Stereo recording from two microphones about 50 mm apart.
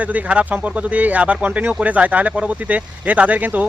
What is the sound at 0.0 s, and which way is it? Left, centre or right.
Speech, right.